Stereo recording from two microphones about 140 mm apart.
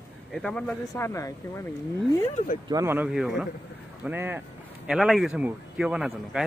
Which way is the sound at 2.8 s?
15° right (ahead or behind).